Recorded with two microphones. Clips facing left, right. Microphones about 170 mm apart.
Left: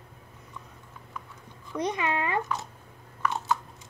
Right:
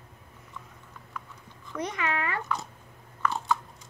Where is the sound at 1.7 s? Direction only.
15° left (ahead or behind).